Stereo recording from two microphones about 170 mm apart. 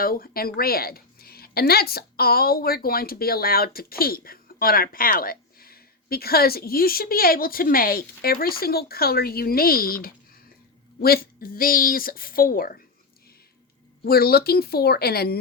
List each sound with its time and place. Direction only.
0.0 s a woman's voice: 60° left (ahead or behind)
14.0 s a woman's voice: 65° left (ahead or behind)